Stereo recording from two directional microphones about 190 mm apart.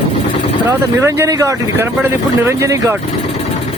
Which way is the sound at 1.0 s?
15° right (ahead or behind).